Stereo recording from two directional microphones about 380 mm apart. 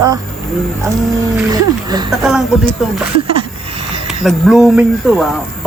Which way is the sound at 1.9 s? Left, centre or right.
Centre.